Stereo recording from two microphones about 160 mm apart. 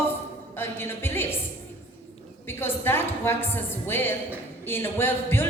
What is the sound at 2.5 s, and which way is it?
A woman's voice, 15° left (ahead or behind).